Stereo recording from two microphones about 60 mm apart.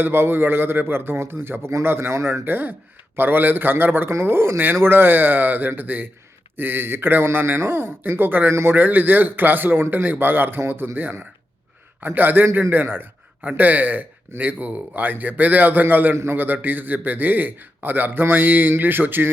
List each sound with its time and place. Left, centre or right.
0.0 s a man's voice: right
2.4 s a man's voice: right